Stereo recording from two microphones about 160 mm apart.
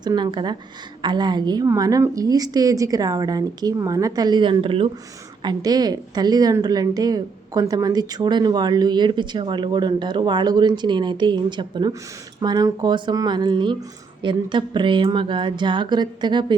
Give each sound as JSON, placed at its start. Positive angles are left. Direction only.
{"t": 0.0, "sound": "a woman's voice", "side_deg": -25}